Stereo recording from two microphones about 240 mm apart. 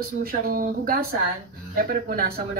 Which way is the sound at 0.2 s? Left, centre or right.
Right.